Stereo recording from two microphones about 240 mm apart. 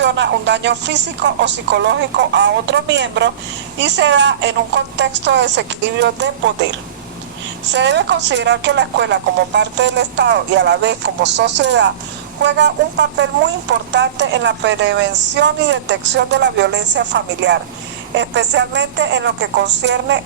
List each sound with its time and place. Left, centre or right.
0.0 s speech: right